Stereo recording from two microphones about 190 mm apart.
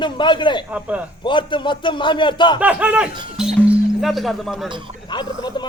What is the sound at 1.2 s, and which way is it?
A man's voice, 25° left (ahead or behind).